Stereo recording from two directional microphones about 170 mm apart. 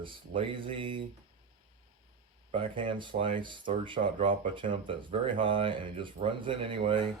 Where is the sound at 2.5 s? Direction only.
30° right (ahead or behind).